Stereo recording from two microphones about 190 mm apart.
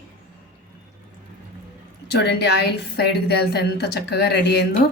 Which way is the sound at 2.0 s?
60° left (ahead or behind).